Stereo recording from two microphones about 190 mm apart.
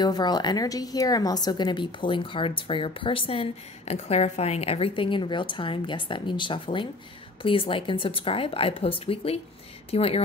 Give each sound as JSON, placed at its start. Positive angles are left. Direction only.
{"t": 0.0, "sound": "a woman's voice", "side_deg": 20}